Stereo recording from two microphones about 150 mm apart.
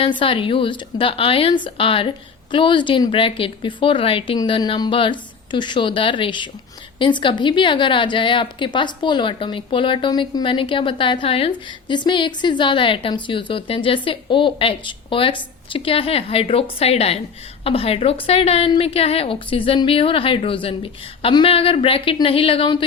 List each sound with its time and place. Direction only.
0.2 s a woman's voice: 35° left (ahead or behind)